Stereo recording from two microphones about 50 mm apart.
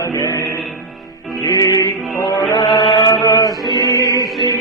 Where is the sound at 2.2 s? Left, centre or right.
Left.